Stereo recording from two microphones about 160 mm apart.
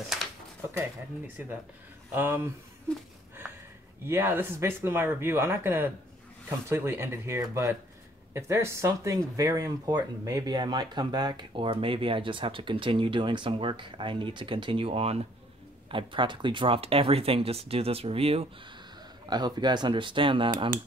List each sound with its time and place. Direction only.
0.7 s speech: 10° right (ahead or behind)
4.0 s speech: 15° right (ahead or behind); by 18.5 s 40° right (ahead or behind)
19.2 s speech: 25° right (ahead or behind)